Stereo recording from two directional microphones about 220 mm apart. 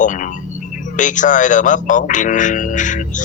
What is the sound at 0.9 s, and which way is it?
Speech, 35° left (ahead or behind).